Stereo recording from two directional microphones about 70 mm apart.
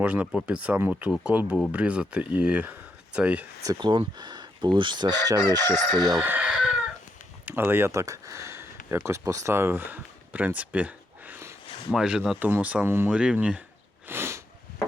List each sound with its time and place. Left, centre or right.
0.0 s speech: right
3.8 s chicken: right
5.7 s speech: right
6.4 s chicken: centre
7.4 s speech: right
7.9 s speech: right
11.9 s speech: centre
12.4 s speech: right
13.1 s speech: centre
14.1 s sniff: right